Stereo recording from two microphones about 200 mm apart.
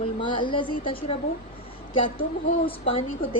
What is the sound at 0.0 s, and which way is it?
A woman's voice, 25° left (ahead or behind).